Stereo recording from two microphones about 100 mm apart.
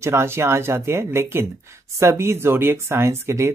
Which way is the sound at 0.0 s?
25° right (ahead or behind).